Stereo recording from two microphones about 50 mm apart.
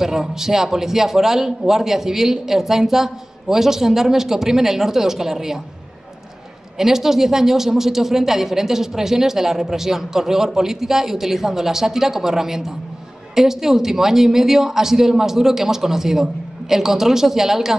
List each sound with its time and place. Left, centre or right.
0.0 s a woman's voice: centre
6.8 s a woman's voice: centre